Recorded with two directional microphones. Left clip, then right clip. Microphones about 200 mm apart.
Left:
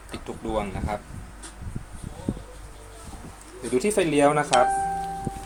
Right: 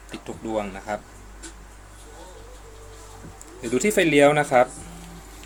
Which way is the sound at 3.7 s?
35° right (ahead or behind).